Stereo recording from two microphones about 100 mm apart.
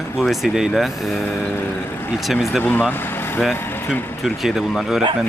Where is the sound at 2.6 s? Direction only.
20° left (ahead or behind).